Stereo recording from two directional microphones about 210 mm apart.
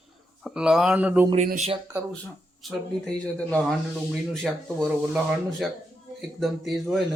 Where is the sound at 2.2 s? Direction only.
5° left (ahead or behind).